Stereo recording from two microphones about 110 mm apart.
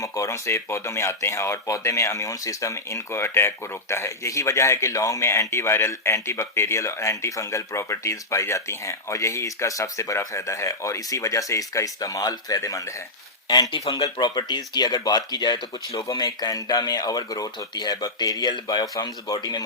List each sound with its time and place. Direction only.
0.0 s speech: 30° left (ahead or behind)
15.9 s speech: 30° left (ahead or behind)